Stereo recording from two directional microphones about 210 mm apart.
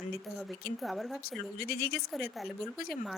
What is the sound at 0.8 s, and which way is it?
Speech, centre (ahead or behind).